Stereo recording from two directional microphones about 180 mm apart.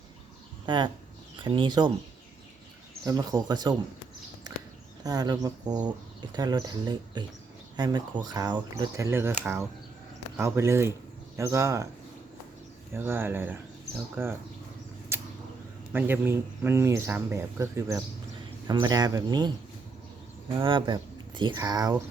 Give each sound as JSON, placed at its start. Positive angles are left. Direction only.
{"t": 0.6, "sound": "speech", "side_deg": -25}
{"t": 3.1, "sound": "speech", "side_deg": -20}
{"t": 5.0, "sound": "speech", "side_deg": -20}
{"t": 12.9, "sound": "speech", "side_deg": -10}
{"t": 15.1, "sound": "a sound", "side_deg": -15}
{"t": 15.9, "sound": "speech", "side_deg": -10}